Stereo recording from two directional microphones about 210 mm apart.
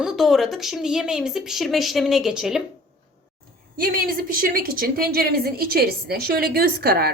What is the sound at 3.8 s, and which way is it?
A woman's voice, 45° right (ahead or behind).